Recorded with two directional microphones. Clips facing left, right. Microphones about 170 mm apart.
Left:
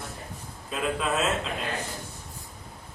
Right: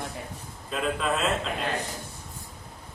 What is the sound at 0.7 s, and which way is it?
Speech, centre (ahead or behind).